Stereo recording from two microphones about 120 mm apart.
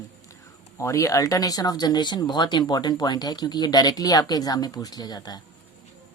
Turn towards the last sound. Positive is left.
turn(degrees=35)  # may be behind; listen again after turning